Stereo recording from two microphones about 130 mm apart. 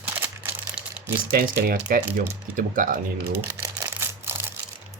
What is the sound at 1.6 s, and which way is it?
Speech, 90° right.